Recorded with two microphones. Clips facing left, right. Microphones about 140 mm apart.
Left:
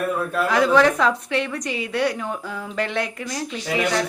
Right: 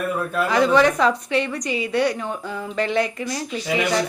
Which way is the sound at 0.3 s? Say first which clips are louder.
Even; centre (ahead or behind).